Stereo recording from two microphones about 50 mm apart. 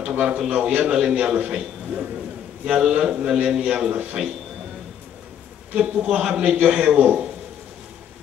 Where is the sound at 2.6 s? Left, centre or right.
Centre.